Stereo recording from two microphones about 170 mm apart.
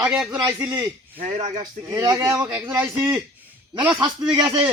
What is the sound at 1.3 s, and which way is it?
Speech, 45° right (ahead or behind).